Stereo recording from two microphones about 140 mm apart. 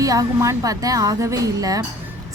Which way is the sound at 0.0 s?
25° right (ahead or behind).